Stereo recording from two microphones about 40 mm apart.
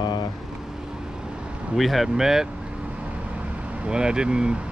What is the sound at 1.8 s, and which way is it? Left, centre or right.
Speech, centre.